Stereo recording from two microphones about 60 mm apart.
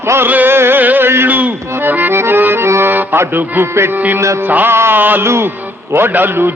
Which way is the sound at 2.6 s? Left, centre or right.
Right.